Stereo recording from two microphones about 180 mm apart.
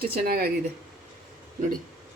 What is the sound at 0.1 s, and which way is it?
Speech, 60° right (ahead or behind).